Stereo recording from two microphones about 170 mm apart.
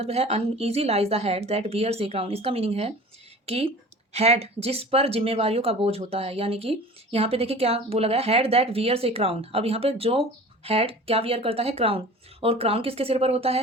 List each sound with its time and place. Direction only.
0.0 s speech: 35° right (ahead or behind)